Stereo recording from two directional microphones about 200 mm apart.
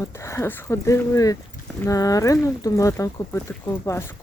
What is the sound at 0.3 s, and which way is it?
Speech, 15° left (ahead or behind).